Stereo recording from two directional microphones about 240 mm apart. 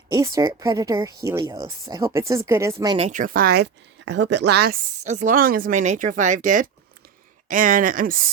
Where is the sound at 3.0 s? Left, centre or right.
Right.